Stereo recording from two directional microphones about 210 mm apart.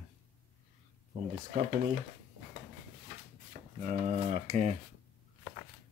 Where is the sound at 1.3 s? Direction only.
35° right (ahead or behind).